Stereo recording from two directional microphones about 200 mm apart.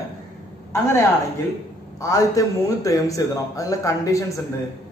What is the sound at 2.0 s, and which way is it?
A man's voice, 15° left (ahead or behind).